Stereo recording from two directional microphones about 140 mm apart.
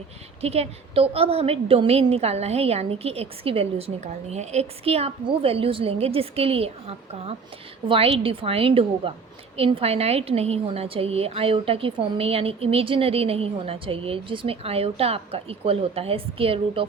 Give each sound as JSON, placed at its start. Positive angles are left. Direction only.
{"t": 0.4, "sound": "a woman's voice", "side_deg": -45}